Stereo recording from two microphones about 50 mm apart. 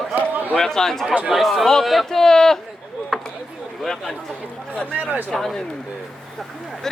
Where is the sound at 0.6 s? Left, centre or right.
Centre.